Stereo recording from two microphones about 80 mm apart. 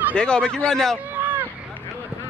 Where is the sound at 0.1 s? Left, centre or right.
Centre.